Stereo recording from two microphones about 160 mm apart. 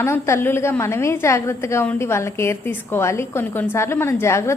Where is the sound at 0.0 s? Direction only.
15° left (ahead or behind).